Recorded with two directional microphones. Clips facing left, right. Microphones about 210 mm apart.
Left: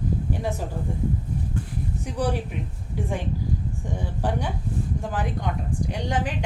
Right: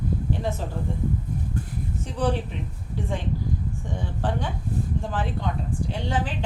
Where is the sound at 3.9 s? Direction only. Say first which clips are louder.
Left 1 dB; 10° left (ahead or behind).